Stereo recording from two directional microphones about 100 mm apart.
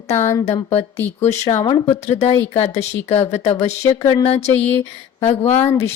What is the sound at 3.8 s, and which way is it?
Speech, 35° left (ahead or behind).